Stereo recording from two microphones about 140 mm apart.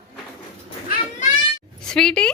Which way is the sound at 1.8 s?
5° left (ahead or behind).